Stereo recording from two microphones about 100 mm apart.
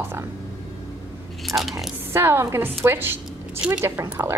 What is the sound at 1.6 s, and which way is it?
Speech, centre (ahead or behind).